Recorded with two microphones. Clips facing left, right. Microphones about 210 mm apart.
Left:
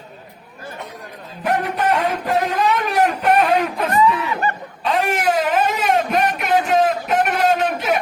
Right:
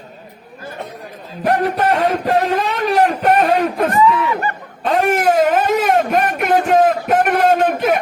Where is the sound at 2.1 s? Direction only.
45° right (ahead or behind).